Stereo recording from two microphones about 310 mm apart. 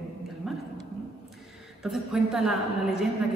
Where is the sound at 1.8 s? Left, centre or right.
Centre.